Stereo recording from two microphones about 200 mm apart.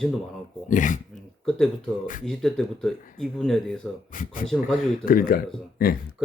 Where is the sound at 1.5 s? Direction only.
5° left (ahead or behind).